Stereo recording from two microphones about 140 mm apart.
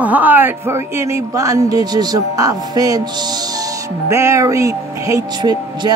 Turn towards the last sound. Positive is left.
turn(degrees=-30)  # may be behind; listen again after turning